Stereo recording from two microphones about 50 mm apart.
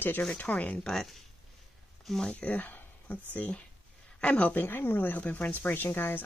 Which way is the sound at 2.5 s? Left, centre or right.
Left.